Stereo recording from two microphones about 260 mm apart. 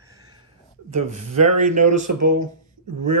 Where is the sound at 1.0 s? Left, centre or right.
Right.